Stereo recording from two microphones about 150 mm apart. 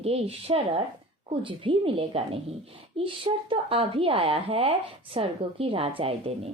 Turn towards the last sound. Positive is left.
turn(degrees=-40)  # may be behind; listen again after turning